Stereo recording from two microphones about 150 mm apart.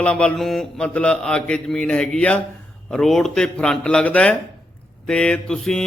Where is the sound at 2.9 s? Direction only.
Centre (ahead or behind).